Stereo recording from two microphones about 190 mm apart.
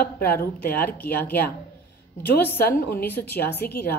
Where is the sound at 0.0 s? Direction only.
55° left (ahead or behind).